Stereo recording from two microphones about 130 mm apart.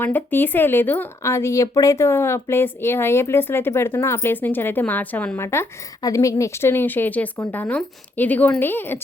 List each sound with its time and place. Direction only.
0.0 s a woman's voice: 15° left (ahead or behind)